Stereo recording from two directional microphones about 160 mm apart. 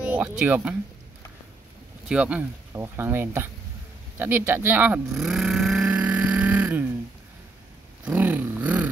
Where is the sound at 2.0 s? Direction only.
5° right (ahead or behind).